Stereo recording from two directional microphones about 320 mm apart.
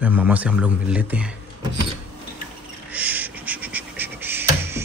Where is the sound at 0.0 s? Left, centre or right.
Centre.